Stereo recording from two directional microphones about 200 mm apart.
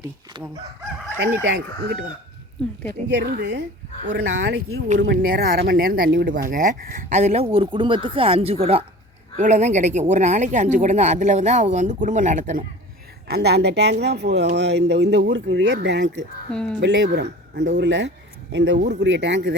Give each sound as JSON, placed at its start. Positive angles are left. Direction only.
{"t": 0.0, "sound": "speech", "side_deg": -20}
{"t": 1.2, "sound": "speech", "side_deg": -60}
{"t": 3.1, "sound": "speech", "side_deg": -55}
{"t": 5.2, "sound": "speech", "side_deg": -45}
{"t": 13.2, "sound": "speech", "side_deg": -55}
{"t": 16.5, "sound": "speech", "side_deg": 5}
{"t": 16.8, "sound": "speech", "side_deg": -65}